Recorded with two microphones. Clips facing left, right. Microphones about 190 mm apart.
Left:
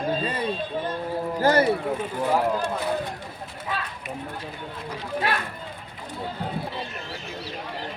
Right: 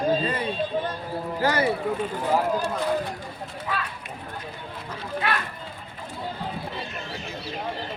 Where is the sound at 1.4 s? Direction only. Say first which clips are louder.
Left 3 dB; 45° left (ahead or behind).